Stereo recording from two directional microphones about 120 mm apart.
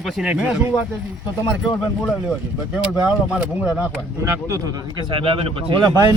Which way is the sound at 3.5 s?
10° right (ahead or behind).